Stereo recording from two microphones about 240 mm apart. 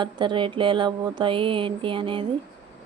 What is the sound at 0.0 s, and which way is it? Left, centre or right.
Speech, centre.